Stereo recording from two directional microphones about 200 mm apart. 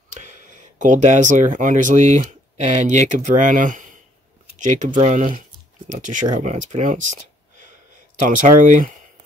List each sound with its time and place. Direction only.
0.7 s speech: 35° right (ahead or behind)
8.3 s speech: 40° right (ahead or behind)